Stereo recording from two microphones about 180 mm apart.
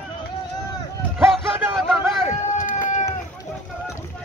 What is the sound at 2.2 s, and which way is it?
Run, 45° left (ahead or behind).